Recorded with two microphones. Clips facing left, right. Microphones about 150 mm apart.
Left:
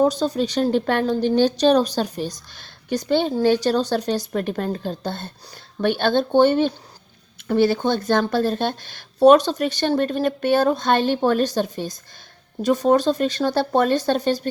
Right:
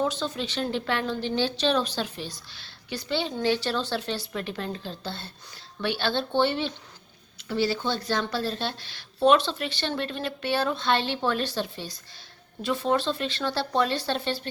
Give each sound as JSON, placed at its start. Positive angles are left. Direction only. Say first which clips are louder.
{"t": 0.0, "sound": "speech", "louder": "left 9 dB", "side_deg": 40}